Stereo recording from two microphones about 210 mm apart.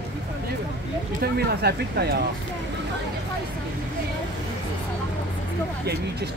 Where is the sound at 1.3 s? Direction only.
50° right (ahead or behind).